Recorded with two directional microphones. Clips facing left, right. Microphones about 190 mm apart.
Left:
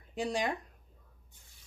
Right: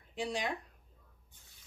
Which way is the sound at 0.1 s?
45° left (ahead or behind).